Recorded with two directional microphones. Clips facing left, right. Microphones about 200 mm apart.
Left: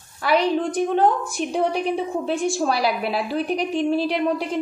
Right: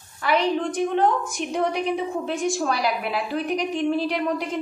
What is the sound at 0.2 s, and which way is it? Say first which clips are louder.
Speech: left 2 dB; 35° left (ahead or behind).